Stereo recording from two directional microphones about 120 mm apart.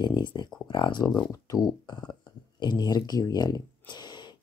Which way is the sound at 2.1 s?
35° left (ahead or behind).